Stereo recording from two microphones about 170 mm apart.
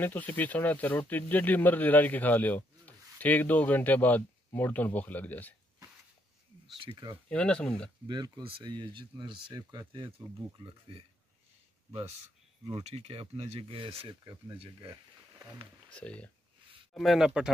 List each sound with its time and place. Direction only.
0.0 s speech: 10° left (ahead or behind)
6.9 s speech: 25° right (ahead or behind)
7.2 s speech: 5° left (ahead or behind)
8.1 s speech: 25° right (ahead or behind)
12.8 s speech: 40° right (ahead or behind)
15.9 s speech: 5° left (ahead or behind)